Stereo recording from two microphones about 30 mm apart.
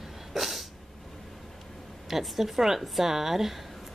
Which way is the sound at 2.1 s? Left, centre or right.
Centre.